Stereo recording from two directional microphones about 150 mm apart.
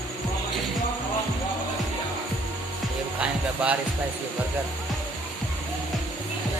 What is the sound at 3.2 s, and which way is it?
Music, 10° right (ahead or behind).